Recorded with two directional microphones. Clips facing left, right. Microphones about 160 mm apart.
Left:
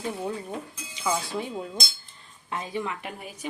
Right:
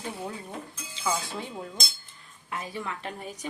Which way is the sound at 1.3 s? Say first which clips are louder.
Left 5 dB; 20° left (ahead or behind).